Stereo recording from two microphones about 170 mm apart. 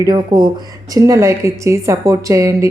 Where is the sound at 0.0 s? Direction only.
25° right (ahead or behind).